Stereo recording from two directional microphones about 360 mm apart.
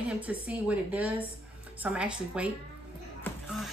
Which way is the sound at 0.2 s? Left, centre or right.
Centre.